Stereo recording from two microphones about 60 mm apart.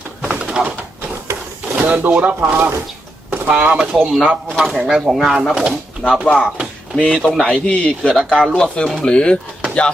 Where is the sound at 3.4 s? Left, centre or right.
Centre.